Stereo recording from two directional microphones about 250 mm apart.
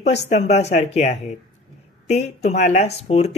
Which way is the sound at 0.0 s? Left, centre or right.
Left.